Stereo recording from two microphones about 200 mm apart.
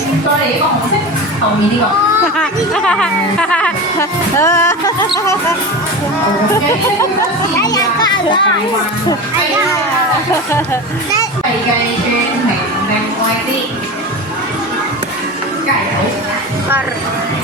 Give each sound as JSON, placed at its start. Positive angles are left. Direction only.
{"t": 2.4, "sound": "speech", "side_deg": 5}
{"t": 4.4, "sound": "music", "side_deg": 15}
{"t": 7.6, "sound": "a child's voice", "side_deg": 20}